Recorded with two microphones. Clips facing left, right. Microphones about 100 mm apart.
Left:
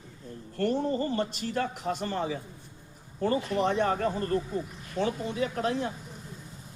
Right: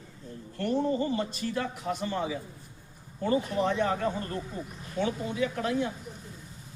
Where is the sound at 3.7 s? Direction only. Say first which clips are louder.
Left 1 dB; 40° left (ahead or behind).